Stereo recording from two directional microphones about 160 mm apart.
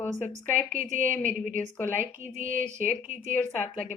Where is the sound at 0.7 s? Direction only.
55° right (ahead or behind).